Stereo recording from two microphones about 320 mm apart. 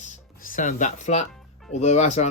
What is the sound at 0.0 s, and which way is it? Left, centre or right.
Music, left.